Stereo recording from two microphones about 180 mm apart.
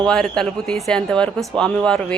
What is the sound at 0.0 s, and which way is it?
Speech, 5° left (ahead or behind).